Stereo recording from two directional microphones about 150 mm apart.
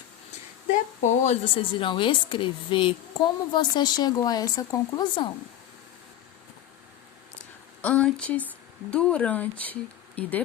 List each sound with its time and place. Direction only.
0.7 s a woman's voice: 50° left (ahead or behind); by 5.3 s 30° left (ahead or behind)
7.8 s speech: 10° left (ahead or behind)